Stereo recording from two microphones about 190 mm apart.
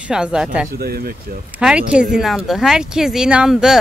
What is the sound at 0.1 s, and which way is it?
Speech, 5° right (ahead or behind).